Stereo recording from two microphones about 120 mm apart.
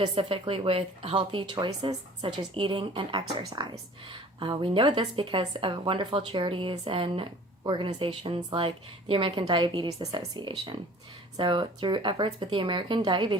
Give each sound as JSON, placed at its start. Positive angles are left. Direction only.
{"t": 0.0, "sound": "speech", "side_deg": -45}